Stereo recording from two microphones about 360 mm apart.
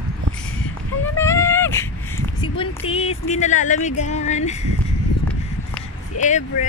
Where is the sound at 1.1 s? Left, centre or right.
Centre.